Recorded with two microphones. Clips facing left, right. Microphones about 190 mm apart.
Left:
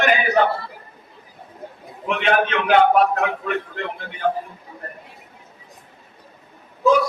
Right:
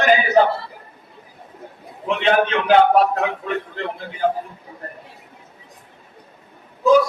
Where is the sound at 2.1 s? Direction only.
30° right (ahead or behind).